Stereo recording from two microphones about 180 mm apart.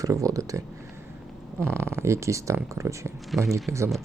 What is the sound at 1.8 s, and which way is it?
Speech, 15° right (ahead or behind).